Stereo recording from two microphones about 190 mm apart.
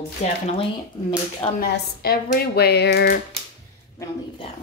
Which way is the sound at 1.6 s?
55° left (ahead or behind).